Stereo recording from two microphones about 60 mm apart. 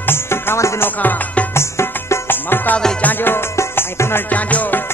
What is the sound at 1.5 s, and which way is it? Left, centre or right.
Music, left.